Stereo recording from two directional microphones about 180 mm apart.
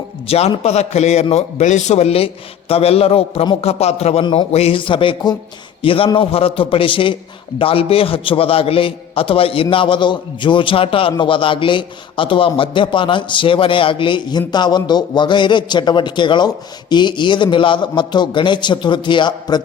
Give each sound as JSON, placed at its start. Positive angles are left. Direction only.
{"t": 0.3, "sound": "a man's voice", "side_deg": 35}